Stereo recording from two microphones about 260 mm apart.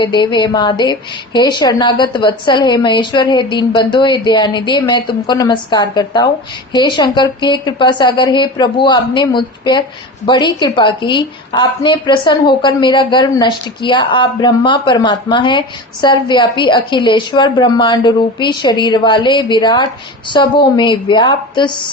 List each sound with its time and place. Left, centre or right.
0.0 s a woman's voice: centre